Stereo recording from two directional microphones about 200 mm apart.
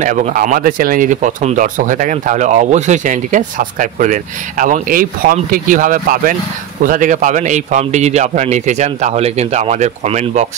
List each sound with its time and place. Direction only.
0.0 s speech: 40° right (ahead or behind)